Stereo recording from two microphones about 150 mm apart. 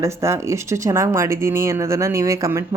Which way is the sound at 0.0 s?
20° right (ahead or behind).